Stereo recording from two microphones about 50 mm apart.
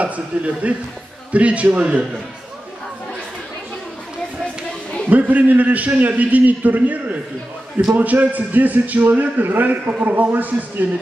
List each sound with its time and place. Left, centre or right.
0.0 s a man's voice: right
5.1 s a man's voice: right